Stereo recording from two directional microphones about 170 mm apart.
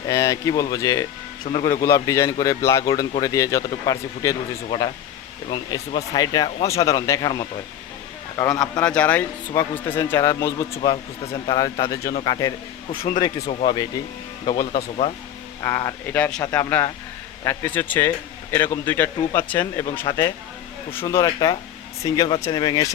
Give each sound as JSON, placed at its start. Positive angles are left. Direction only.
{"t": 0.1, "sound": "speech", "side_deg": 20}
{"t": 1.5, "sound": "speech", "side_deg": 40}
{"t": 1.8, "sound": "speech", "side_deg": 15}
{"t": 8.8, "sound": "speech", "side_deg": 5}
{"t": 10.8, "sound": "speech", "side_deg": 30}